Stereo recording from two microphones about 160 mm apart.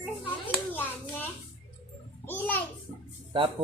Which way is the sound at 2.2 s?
10° left (ahead or behind).